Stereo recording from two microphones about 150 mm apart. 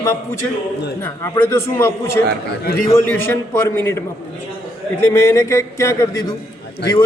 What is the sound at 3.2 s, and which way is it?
A man's voice, 15° left (ahead or behind).